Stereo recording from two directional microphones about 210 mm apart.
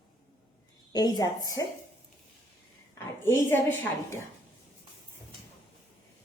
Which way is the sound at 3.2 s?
10° left (ahead or behind).